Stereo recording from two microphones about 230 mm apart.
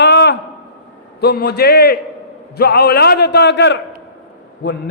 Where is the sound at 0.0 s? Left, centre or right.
Left.